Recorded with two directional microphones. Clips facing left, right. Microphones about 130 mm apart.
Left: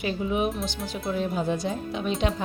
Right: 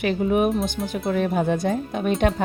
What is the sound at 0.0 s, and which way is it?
A woman's voice, 60° right (ahead or behind).